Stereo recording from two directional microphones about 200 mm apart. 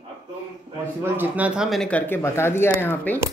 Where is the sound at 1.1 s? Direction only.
10° right (ahead or behind); by 3.1 s 10° left (ahead or behind).